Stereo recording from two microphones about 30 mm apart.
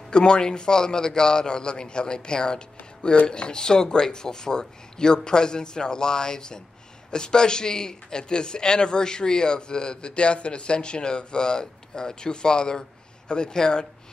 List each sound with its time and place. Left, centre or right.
0.1 s a man's voice: left